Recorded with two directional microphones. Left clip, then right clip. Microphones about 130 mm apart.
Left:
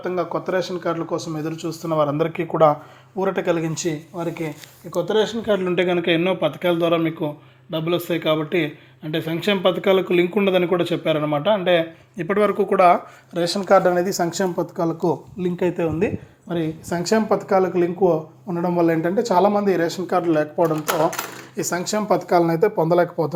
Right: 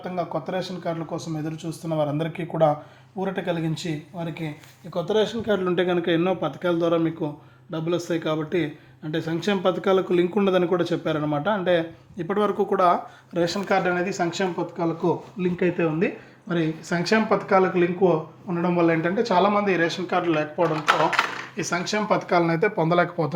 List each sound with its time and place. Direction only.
0.0 s speech: 30° left (ahead or behind)
5.0 s speech: 10° left (ahead or behind)
12.1 s speech: 10° left (ahead or behind)
13.3 s speech: 5° right (ahead or behind)
14.1 s speech: 45° left (ahead or behind)
15.4 s speech: 10° left (ahead or behind)
16.5 s speech: 5° right (ahead or behind)
16.9 s speech: 15° left (ahead or behind); by 20.7 s 40° left (ahead or behind)
21.5 s speech: 30° left (ahead or behind)